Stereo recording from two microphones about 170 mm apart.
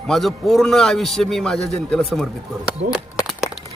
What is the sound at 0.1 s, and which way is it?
A man's voice, centre (ahead or behind).